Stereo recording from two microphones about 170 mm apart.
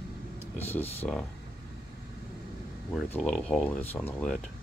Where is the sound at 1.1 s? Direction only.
Centre (ahead or behind).